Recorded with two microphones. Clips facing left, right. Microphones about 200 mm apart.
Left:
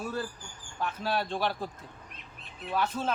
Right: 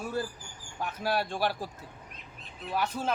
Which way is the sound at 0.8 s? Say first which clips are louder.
Right 1 dB; 10° right (ahead or behind).